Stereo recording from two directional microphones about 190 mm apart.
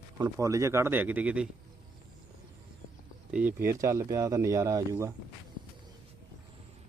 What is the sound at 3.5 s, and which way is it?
Speech, 45° right (ahead or behind).